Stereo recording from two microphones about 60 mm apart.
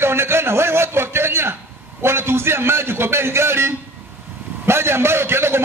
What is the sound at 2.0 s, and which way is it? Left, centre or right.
A man's voice, right.